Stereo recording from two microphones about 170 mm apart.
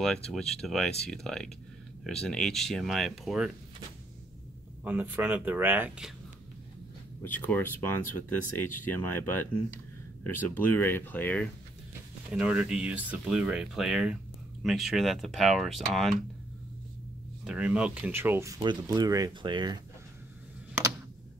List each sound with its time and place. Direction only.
0.0 s speech: 5° left (ahead or behind)
4.8 s speech: 10° right (ahead or behind)
7.2 s speech: 10° left (ahead or behind)
12.3 s speech: 5° right (ahead or behind)
17.5 s speech: 5° right (ahead or behind); by 19.8 s 25° right (ahead or behind)